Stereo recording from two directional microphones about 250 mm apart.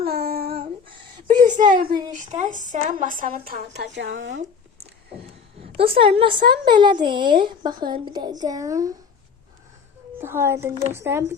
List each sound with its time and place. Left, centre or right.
0.0 s a sound: right
1.6 s a woman's voice: centre
2.1 s a woman's voice: right
5.7 s a woman's voice: right
10.2 s a woman's voice: centre